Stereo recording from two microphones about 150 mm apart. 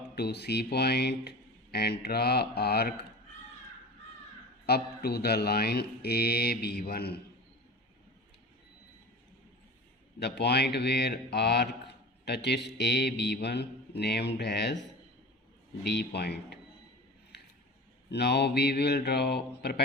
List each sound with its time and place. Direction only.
0.2 s speech: 90° left
4.6 s speech: 90° left
10.2 s speech: 90° left
15.9 s speech: 90° left
18.1 s speech: 90° left